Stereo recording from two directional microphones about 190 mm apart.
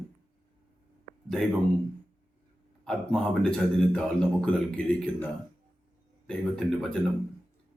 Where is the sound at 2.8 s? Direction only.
5° left (ahead or behind).